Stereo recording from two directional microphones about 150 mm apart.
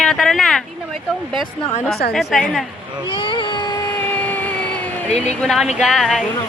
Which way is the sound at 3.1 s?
35° left (ahead or behind).